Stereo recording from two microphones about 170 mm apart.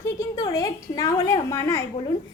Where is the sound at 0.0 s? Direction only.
20° left (ahead or behind).